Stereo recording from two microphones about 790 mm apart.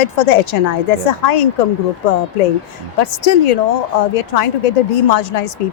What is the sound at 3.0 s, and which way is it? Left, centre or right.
A woman's voice, left.